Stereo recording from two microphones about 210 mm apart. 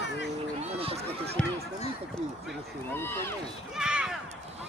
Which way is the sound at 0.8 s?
25° right (ahead or behind).